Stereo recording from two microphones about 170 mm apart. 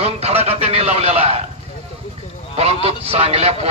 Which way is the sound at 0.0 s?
35° right (ahead or behind).